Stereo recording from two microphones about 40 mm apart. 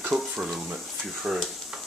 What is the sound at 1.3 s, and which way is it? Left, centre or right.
Stir, centre.